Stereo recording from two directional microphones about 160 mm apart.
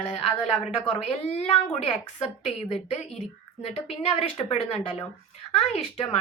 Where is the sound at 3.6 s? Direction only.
40° left (ahead or behind).